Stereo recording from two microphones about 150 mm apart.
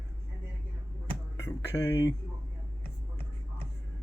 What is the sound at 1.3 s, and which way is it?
Speech, 20° left (ahead or behind).